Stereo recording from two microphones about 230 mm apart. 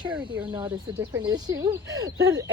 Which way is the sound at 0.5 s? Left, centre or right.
Centre.